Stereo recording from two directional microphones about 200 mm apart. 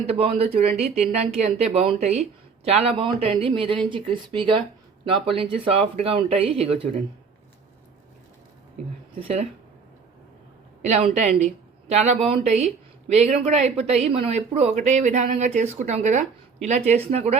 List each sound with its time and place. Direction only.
0.0 s a woman's voice: 30° right (ahead or behind)
9.1 s a woman's voice: 30° right (ahead or behind)
10.8 s a woman's voice: 35° right (ahead or behind)